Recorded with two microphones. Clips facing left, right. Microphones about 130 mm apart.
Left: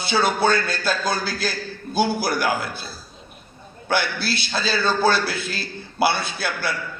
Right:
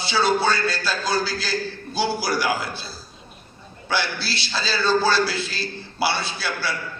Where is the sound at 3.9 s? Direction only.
55° left (ahead or behind).